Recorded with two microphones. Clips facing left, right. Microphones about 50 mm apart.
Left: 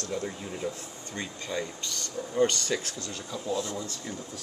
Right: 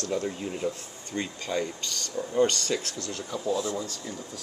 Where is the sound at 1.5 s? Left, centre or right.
Right.